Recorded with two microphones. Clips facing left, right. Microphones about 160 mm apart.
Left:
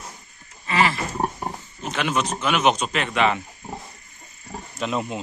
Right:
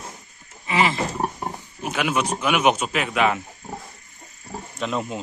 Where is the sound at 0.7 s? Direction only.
15° right (ahead or behind).